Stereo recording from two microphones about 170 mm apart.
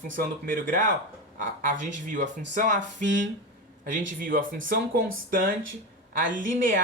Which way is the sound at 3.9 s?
50° right (ahead or behind).